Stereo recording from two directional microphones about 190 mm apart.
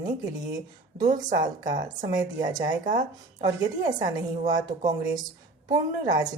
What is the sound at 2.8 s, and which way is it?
Speech, 45° right (ahead or behind).